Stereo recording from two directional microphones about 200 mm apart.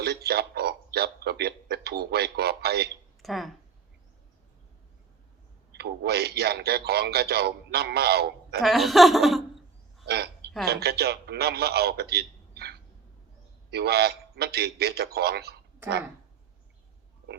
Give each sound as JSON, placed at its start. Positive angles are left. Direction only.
{"t": 0.0, "sound": "a sound", "side_deg": -50}
{"t": 3.2, "sound": "speech", "side_deg": 0}
{"t": 5.7, "sound": "a man's voice", "side_deg": -55}
{"t": 8.6, "sound": "laughter", "side_deg": 0}
{"t": 10.1, "sound": "a sound", "side_deg": -55}
{"t": 10.7, "sound": "a man's voice", "side_deg": -50}